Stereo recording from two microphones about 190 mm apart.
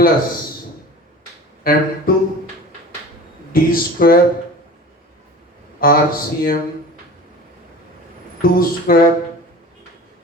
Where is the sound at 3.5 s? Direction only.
50° left (ahead or behind).